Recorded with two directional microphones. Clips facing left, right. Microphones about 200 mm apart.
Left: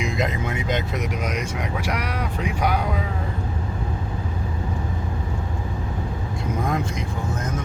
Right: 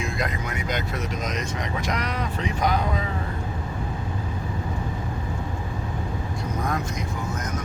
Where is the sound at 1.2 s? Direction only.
10° left (ahead or behind).